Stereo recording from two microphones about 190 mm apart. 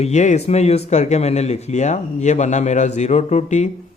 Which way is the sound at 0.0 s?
40° left (ahead or behind).